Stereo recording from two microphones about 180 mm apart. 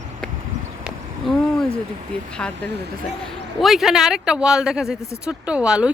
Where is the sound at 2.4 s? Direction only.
5° left (ahead or behind).